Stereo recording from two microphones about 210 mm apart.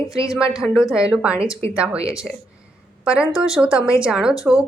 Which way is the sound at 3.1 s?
5° right (ahead or behind).